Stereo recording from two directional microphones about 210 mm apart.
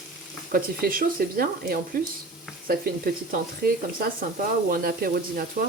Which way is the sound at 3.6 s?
45° right (ahead or behind).